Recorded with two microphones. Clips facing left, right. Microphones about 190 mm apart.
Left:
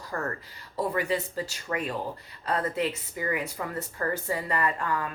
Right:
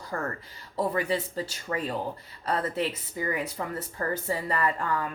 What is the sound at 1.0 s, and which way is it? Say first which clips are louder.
Speech: even; 30° right (ahead or behind).